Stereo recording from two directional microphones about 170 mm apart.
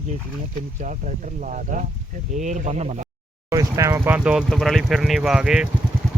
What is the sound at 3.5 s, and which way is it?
Speech, 20° right (ahead or behind).